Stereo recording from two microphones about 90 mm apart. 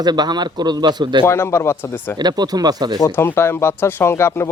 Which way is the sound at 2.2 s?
50° right (ahead or behind).